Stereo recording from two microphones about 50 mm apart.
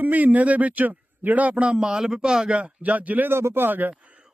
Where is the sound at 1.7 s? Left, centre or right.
Centre.